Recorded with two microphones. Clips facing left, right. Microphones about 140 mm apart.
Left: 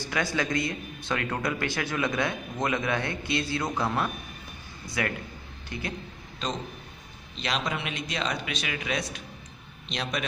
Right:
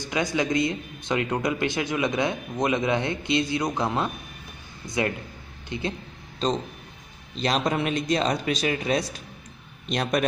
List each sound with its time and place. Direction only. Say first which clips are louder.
0.0 s a man's voice: right 3 dB; 20° right (ahead or behind); by 9.2 s 35° right (ahead or behind)
9.8 s a man's voice: right 7 dB; 50° right (ahead or behind)